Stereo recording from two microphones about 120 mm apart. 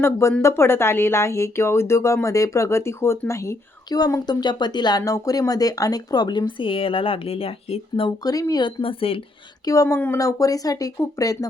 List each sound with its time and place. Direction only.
0.0 s speech: 20° left (ahead or behind)
3.8 s speech: 35° left (ahead or behind); by 8.1 s 50° left (ahead or behind)
8.2 s speech: 30° left (ahead or behind)
8.8 s speech: 50° left (ahead or behind)
9.6 s speech: 25° left (ahead or behind)